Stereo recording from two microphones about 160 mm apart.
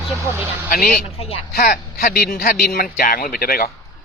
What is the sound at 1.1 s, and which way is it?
Speech, 40° left (ahead or behind).